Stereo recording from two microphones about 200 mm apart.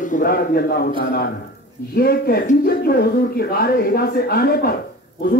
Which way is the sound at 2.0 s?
50° left (ahead or behind).